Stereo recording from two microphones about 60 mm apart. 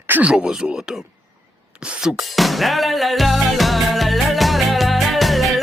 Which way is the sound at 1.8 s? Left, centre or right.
Centre.